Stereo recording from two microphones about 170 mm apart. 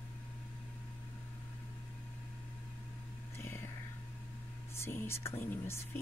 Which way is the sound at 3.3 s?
15° left (ahead or behind).